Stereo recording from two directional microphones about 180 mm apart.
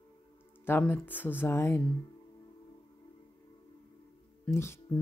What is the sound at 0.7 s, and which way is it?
Speech, 10° left (ahead or behind).